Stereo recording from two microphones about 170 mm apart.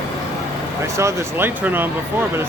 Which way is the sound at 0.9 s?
15° right (ahead or behind).